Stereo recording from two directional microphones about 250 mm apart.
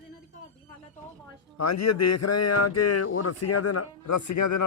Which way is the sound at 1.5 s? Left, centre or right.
Left.